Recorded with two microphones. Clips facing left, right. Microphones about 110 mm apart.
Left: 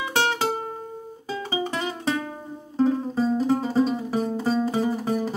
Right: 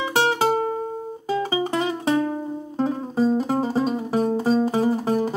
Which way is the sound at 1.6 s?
30° right (ahead or behind).